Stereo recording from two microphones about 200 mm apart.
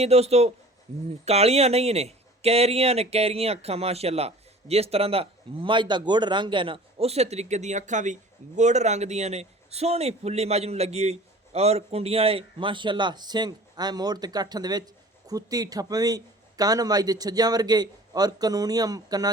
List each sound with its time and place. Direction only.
0.0 s speech: 30° right (ahead or behind)